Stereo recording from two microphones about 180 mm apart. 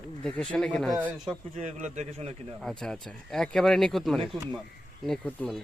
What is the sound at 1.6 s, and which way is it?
Speech, 40° right (ahead or behind).